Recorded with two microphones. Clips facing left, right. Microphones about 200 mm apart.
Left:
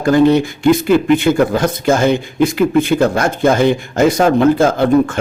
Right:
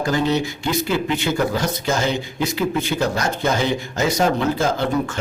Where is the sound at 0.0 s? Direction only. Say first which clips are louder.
Left 9 dB; 55° left (ahead or behind).